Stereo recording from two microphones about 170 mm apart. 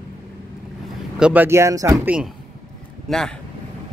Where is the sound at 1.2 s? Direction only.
10° right (ahead or behind).